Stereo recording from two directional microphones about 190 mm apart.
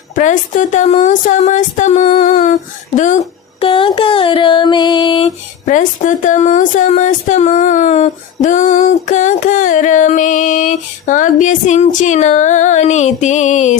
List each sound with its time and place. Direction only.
0.1 s a woman's voice: 40° left (ahead or behind)
2.0 s humming: 35° left (ahead or behind)
5.6 s a woman's voice: 40° left (ahead or behind)